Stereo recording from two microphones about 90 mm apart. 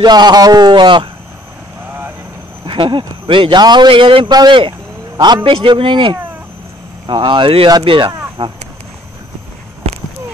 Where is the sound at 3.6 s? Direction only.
55° right (ahead or behind).